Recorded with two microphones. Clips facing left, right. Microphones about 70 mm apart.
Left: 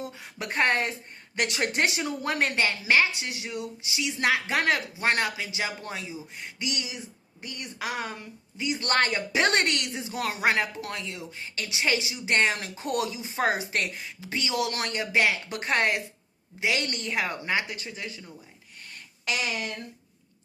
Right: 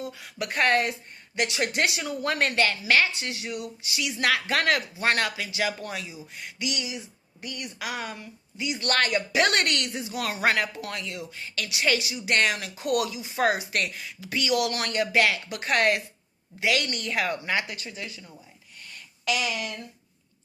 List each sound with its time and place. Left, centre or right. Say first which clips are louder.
0.0 s speech: right 2 dB; left
1.4 s speech: right 1 dB; left
1.7 s speech: even; left
2.2 s speech: right 2 dB; centre
9.7 s speech: right 1 dB; centre
10.1 s speech: even; left